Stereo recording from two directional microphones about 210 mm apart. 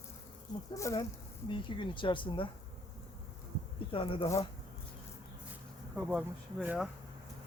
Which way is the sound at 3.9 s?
25° left (ahead or behind).